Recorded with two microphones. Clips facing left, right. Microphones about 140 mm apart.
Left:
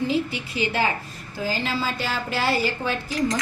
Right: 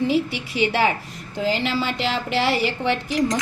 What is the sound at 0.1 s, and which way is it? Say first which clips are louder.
A woman's voice: right 3 dB; 75° right (ahead or behind).